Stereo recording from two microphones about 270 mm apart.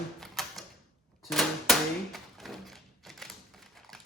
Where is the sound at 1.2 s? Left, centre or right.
Centre.